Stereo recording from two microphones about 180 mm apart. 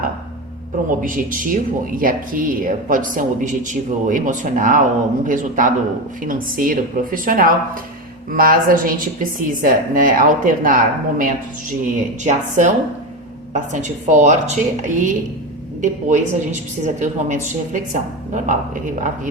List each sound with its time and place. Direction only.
1.0 s a woman's voice: 50° right (ahead or behind)